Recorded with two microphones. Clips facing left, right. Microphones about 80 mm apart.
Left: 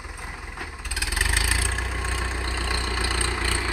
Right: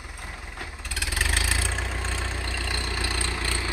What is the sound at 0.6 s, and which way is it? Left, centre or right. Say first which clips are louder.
Vehicle: left 1 dB; centre.